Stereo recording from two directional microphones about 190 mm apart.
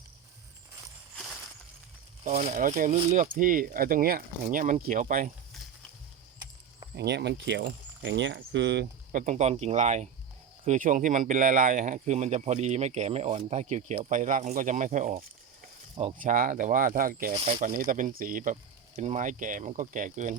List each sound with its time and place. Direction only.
1.1 s a sound: centre (ahead or behind)
2.4 s speech: 40° right (ahead or behind)
6.9 s speech: 60° right (ahead or behind)
9.1 s speech: 40° right (ahead or behind)
17.3 s speech: 35° right (ahead or behind)